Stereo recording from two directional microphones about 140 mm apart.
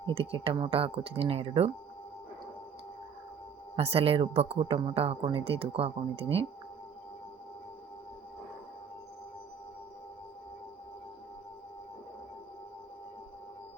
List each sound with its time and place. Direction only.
0.0 s speech: 40° right (ahead or behind)
3.8 s speech: 45° right (ahead or behind)